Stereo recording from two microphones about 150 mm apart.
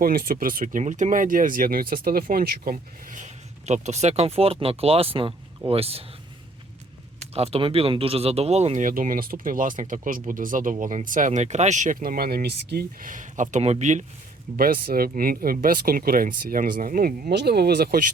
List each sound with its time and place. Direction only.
0.0 s speech: 80° right; by 6.1 s 40° right (ahead or behind)
7.3 s speech: 40° right (ahead or behind)
14.5 s speech: 80° right